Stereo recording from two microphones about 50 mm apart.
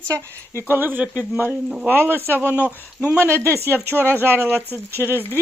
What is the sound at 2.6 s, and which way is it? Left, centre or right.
Speech, left.